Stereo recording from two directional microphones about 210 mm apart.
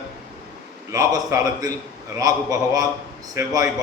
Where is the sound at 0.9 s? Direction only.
15° right (ahead or behind).